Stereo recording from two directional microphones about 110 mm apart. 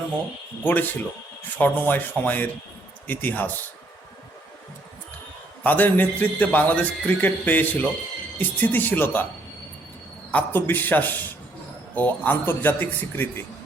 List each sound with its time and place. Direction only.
0.6 s a man's voice: 15° left (ahead or behind)
5.6 s a man's voice: 15° left (ahead or behind)
10.3 s a man's voice: 20° left (ahead or behind)